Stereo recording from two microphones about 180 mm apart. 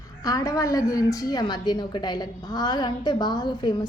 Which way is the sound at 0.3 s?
20° left (ahead or behind).